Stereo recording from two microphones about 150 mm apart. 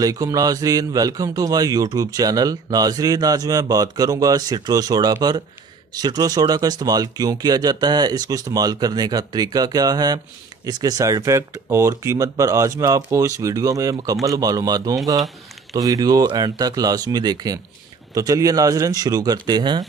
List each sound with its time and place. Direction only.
0.0 s speech: 25° right (ahead or behind)